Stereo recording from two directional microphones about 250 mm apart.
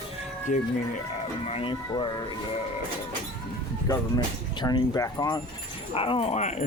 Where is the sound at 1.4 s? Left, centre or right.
Left.